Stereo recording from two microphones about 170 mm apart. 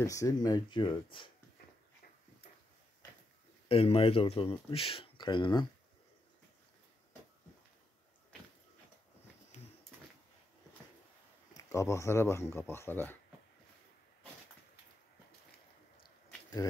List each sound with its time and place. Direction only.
0.0 s speech: 20° left (ahead or behind)
3.6 s speech: 35° left (ahead or behind)
11.5 s speech: 20° left (ahead or behind)